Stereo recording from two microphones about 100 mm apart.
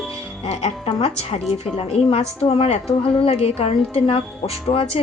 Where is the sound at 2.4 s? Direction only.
90° left; by 5.0 s 75° left (ahead or behind).